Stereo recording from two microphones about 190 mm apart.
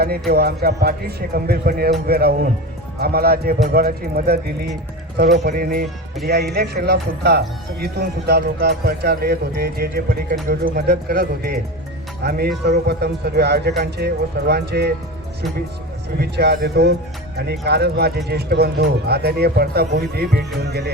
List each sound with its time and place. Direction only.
0.0 s a man's voice: 55° right (ahead or behind)
16.2 s a man's voice: 60° right (ahead or behind)